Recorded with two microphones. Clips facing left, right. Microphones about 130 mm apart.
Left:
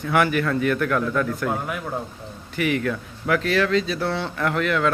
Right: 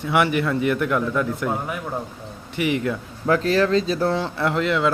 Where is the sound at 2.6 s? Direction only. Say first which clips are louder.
Right 1 dB; 25° right (ahead or behind).